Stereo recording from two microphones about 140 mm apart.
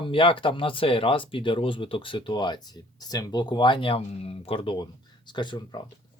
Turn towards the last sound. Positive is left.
turn(degrees=35)  # may be behind; listen again after turning